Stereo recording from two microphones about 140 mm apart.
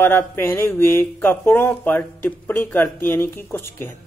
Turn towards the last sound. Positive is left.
turn(degrees=15)  # may be behind; listen again after turning